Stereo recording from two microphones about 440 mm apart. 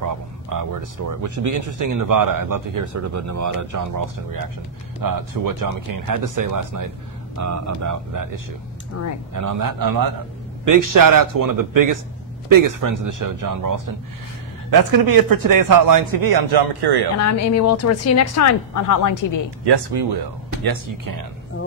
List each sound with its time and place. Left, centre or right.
0.0 s speech: right
9.0 s speech: left
9.3 s speech: right
17.2 s speech: left
19.6 s speech: right
20.6 s speech: right